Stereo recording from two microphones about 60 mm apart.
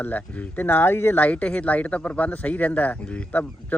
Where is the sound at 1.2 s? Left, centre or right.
Left.